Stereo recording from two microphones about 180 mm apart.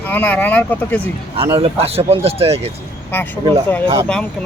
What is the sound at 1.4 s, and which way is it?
Speech, 30° right (ahead or behind).